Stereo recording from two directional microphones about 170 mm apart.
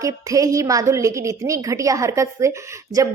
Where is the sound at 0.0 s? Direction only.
20° right (ahead or behind).